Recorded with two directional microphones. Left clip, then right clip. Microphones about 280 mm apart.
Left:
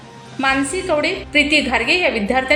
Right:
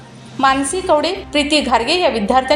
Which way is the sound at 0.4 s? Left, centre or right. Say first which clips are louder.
Right 4 dB; centre.